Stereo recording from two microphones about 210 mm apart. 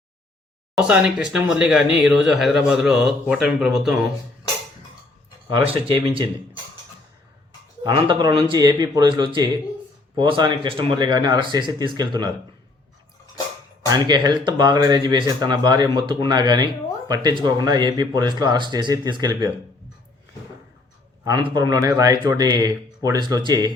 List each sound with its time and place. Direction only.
0.8 s speech: 5° right (ahead or behind)
5.7 s speech: 25° right (ahead or behind)
7.9 s speech: 25° right (ahead or behind)
13.8 s speech: 20° right (ahead or behind)
21.2 s speech: 20° right (ahead or behind)